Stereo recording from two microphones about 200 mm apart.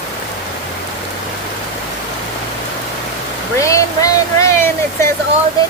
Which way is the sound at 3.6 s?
15° left (ahead or behind).